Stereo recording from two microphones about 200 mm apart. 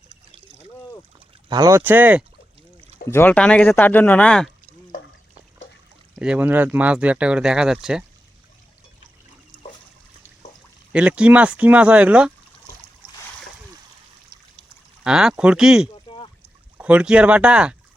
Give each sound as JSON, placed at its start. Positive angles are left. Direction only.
{"t": 1.5, "sound": "speech", "side_deg": -20}
{"t": 3.1, "sound": "speech", "side_deg": 10}
{"t": 6.1, "sound": "speech", "side_deg": -5}
{"t": 10.9, "sound": "speech", "side_deg": -5}
{"t": 15.0, "sound": "speech", "side_deg": -5}
{"t": 16.0, "sound": "rowboat", "side_deg": 25}
{"t": 16.7, "sound": "speech", "side_deg": -5}